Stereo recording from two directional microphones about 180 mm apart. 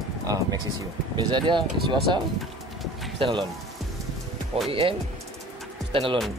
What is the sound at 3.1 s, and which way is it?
Speech, 30° right (ahead or behind).